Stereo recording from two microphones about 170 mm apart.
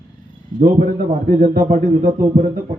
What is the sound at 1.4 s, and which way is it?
Speech, 55° right (ahead or behind).